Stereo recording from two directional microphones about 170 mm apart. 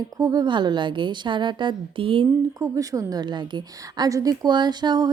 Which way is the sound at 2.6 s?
20° right (ahead or behind).